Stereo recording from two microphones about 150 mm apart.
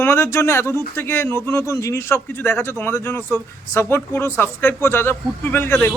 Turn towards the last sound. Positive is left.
turn(degrees=15)  # may be behind; listen again after turning